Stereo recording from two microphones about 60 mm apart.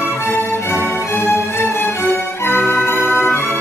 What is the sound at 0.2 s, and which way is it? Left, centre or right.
Music, left.